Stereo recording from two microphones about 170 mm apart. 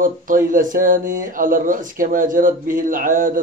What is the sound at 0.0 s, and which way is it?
Speech, 50° right (ahead or behind).